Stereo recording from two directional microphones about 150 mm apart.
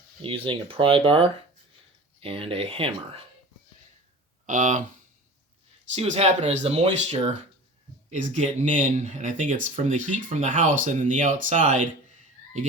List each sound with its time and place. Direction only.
0.2 s speech: 35° right (ahead or behind)
4.4 s speech: 55° right (ahead or behind)
5.9 s speech: 45° right (ahead or behind)